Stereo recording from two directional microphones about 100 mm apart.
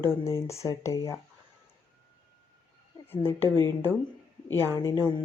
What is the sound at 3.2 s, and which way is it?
Speech, 25° left (ahead or behind).